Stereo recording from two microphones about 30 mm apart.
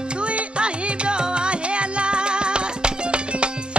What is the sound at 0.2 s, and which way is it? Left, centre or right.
Music, right.